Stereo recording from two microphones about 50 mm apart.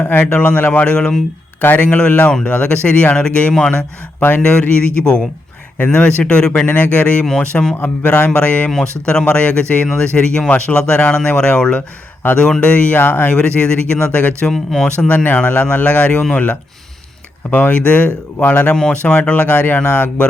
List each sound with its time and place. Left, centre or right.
0.0 s speech: left
1.6 s speech: left
4.2 s speech: left
4.7 s speech: left
6.7 s speech: left
7.3 s speech: centre
7.8 s speech: left
14.4 s speech: centre
15.0 s speech: left
19.8 s speech: left